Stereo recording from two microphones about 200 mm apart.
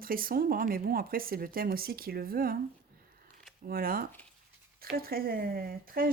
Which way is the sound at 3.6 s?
45° right (ahead or behind).